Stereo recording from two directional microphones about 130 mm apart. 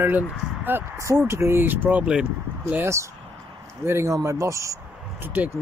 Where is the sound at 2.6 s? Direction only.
20° right (ahead or behind).